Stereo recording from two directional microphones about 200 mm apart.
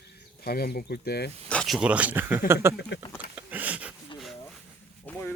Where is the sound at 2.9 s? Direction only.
60° left (ahead or behind).